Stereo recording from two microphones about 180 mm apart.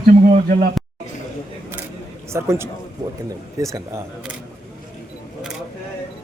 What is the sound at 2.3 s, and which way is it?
Speech, 15° right (ahead or behind).